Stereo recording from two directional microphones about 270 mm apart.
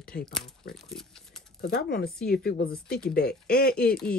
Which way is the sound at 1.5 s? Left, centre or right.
Left.